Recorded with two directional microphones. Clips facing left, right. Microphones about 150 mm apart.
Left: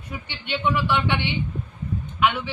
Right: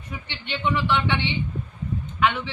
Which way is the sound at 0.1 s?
10° left (ahead or behind).